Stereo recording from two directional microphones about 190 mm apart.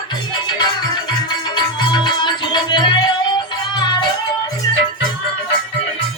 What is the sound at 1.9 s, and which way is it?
Music, 25° left (ahead or behind).